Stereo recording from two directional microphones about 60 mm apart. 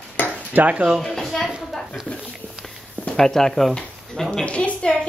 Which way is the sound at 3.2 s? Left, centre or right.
Centre.